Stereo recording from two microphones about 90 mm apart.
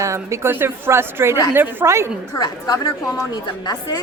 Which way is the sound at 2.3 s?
45° left (ahead or behind).